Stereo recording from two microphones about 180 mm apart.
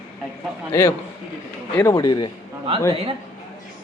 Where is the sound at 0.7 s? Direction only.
15° left (ahead or behind).